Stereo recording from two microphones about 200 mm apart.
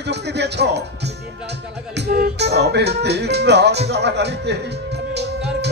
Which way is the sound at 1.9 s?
50° right (ahead or behind).